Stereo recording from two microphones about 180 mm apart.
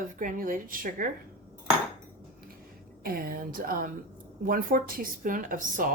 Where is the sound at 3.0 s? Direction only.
55° right (ahead or behind).